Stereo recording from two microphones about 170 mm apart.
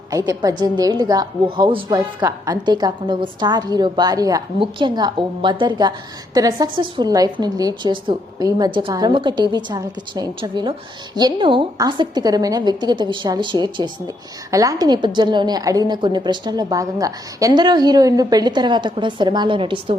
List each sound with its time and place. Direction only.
0.1 s a woman's voice: 20° right (ahead or behind)